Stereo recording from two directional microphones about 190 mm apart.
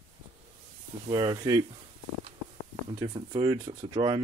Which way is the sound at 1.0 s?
25° right (ahead or behind).